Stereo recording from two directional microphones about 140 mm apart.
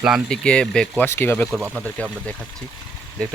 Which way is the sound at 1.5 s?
5° right (ahead or behind).